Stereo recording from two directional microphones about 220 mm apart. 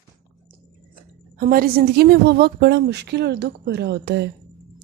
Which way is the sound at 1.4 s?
40° right (ahead or behind).